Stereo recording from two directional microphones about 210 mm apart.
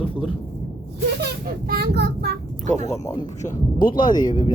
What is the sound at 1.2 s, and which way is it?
A child's voice, 45° right (ahead or behind).